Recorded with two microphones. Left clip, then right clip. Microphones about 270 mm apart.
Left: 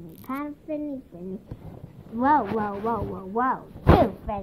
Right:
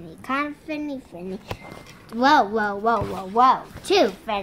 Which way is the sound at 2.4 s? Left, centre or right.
Centre.